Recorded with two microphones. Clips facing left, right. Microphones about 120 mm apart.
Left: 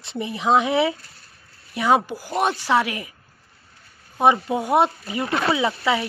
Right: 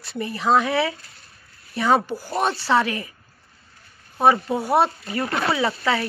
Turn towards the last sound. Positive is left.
turn(degrees=15)  # may be behind; listen again after turning